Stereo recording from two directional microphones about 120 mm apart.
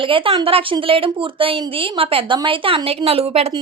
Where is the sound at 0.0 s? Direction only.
45° right (ahead or behind).